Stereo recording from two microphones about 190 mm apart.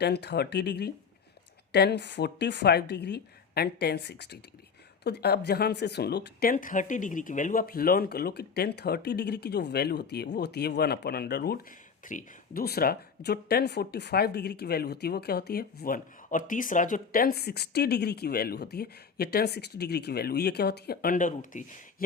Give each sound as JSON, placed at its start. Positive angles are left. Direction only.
{"t": 0.0, "sound": "speech", "side_deg": 60}
{"t": 12.0, "sound": "speech", "side_deg": 45}